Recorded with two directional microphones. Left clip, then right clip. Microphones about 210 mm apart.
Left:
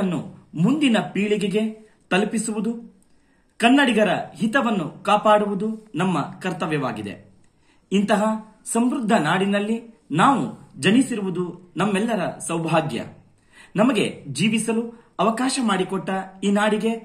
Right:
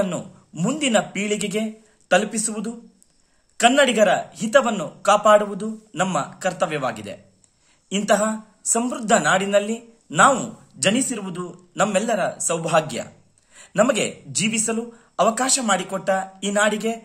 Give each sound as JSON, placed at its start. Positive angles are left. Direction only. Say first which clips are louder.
{"t": 0.0, "sound": "speech", "louder": "right 3 dB", "side_deg": -50}